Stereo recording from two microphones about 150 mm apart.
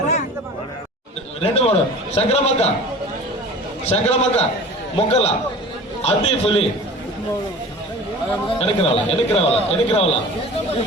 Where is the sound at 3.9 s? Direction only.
40° left (ahead or behind).